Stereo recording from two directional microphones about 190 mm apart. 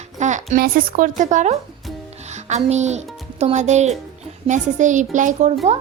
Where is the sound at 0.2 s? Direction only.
40° right (ahead or behind).